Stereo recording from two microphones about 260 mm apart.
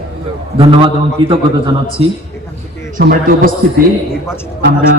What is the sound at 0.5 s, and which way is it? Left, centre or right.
A man's voice, centre.